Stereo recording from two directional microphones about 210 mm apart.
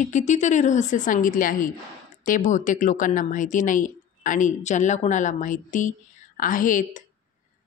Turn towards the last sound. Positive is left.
turn(degrees=40)  # may be behind; listen again after turning